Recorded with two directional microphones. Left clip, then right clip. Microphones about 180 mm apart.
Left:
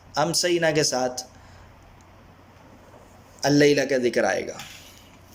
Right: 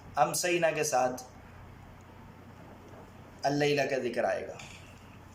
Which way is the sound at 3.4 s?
35° left (ahead or behind).